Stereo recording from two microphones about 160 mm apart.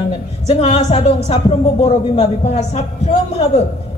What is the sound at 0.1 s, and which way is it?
A woman's voice, 40° left (ahead or behind).